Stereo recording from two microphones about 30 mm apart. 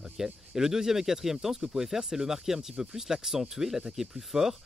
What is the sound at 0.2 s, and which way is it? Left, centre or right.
Speech, centre.